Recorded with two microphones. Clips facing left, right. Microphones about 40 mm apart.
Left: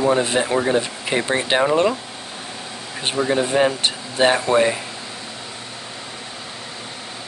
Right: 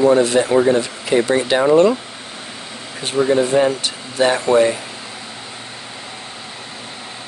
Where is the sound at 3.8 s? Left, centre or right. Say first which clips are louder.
Even; left.